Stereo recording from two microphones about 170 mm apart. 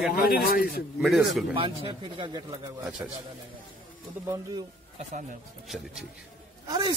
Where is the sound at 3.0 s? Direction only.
15° right (ahead or behind).